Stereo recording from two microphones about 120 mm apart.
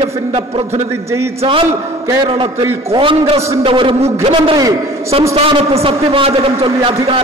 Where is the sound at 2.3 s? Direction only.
45° right (ahead or behind).